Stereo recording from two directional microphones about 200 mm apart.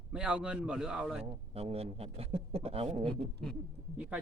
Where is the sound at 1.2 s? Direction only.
30° right (ahead or behind).